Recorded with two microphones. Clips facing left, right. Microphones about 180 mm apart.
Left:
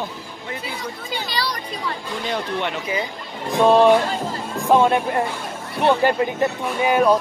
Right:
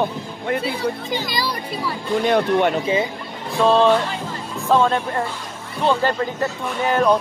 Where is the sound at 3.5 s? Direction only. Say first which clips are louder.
Left 2 dB; 15° left (ahead or behind).